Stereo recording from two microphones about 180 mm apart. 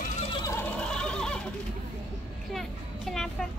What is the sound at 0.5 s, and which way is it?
Neigh, 10° left (ahead or behind).